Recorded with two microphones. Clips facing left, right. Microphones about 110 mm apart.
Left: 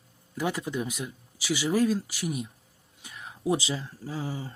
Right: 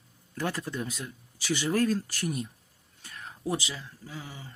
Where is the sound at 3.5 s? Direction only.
25° left (ahead or behind).